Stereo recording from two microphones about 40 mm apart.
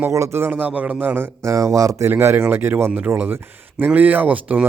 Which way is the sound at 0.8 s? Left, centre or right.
Right.